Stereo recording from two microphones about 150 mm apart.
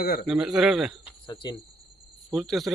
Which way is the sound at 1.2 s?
25° left (ahead or behind).